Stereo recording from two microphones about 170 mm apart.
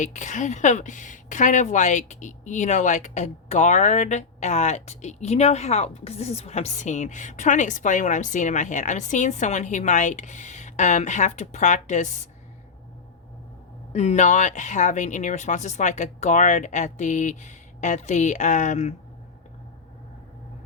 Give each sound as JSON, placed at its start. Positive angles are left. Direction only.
{"t": 0.0, "sound": "a woman's voice", "side_deg": 45}
{"t": 13.9, "sound": "a woman's voice", "side_deg": 40}